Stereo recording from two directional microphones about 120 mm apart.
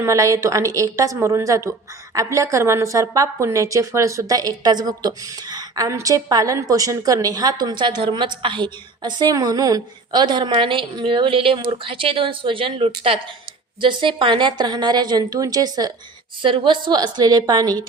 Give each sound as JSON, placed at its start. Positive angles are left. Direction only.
{"t": 0.0, "sound": "a woman's voice", "side_deg": -25}
{"t": 16.4, "sound": "a woman's voice", "side_deg": -45}